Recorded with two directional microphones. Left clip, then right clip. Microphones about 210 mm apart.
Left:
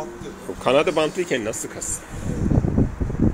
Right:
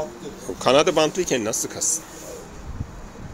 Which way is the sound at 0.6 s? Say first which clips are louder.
Right 1 dB; 10° right (ahead or behind).